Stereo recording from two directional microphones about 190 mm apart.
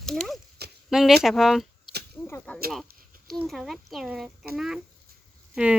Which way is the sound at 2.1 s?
5° left (ahead or behind).